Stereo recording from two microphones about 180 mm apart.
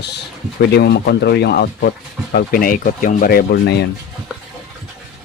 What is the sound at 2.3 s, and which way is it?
Speech, 55° left (ahead or behind).